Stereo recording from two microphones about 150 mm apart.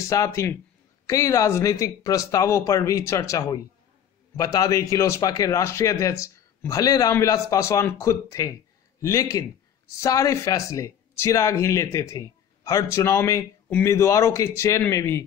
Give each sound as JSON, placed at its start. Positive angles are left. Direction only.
{"t": 0.0, "sound": "speech", "side_deg": 20}